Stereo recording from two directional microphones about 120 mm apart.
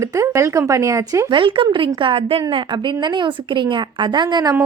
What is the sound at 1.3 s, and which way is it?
A woman's voice, 45° right (ahead or behind).